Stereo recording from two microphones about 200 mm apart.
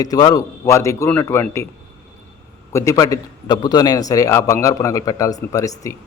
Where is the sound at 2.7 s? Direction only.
15° left (ahead or behind).